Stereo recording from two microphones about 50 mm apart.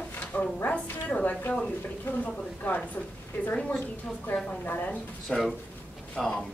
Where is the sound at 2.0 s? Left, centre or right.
Left.